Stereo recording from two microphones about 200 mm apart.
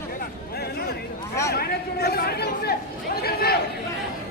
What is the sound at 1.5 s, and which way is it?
Chatter, 50° left (ahead or behind).